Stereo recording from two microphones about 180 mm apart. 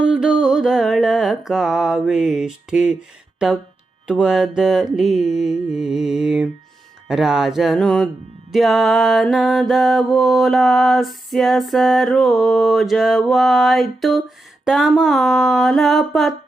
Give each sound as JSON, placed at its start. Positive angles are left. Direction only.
{"t": 0.0, "sound": "mantra", "side_deg": -5}